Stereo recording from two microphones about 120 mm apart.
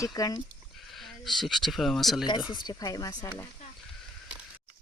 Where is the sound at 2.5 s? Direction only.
35° left (ahead or behind).